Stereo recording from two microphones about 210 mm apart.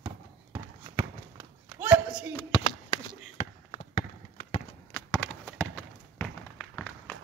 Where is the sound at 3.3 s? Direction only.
40° left (ahead or behind).